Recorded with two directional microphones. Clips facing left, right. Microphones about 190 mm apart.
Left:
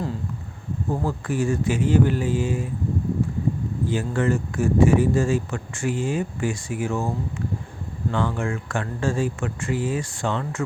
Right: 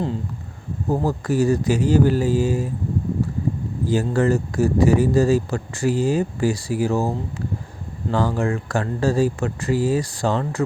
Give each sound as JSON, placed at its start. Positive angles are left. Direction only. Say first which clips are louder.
{"t": 0.9, "sound": "speech", "louder": "right 5 dB", "side_deg": -40}
{"t": 3.8, "sound": "speech", "louder": "right 4 dB", "side_deg": -40}
{"t": 8.1, "sound": "speech", "louder": "right 5 dB", "side_deg": -35}